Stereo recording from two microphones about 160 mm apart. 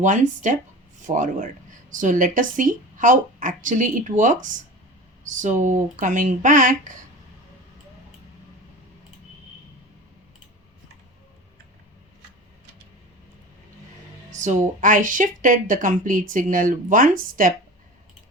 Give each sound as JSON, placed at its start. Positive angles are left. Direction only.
{"t": 0.0, "sound": "speech", "side_deg": -50}
{"t": 14.3, "sound": "speech", "side_deg": -50}